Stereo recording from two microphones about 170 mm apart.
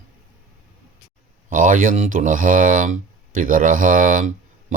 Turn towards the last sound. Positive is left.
turn(degrees=-50)  # may be behind; listen again after turning